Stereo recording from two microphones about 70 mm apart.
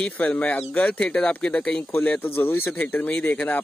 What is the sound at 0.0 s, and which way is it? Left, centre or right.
Speech, centre.